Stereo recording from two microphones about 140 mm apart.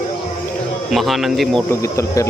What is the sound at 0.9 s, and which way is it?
Speech, centre (ahead or behind).